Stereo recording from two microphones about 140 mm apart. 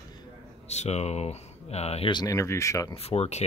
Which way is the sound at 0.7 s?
50° left (ahead or behind).